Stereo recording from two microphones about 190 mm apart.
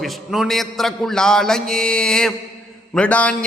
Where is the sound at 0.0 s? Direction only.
Centre (ahead or behind).